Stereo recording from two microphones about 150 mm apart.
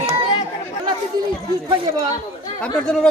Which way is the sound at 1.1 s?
25° right (ahead or behind).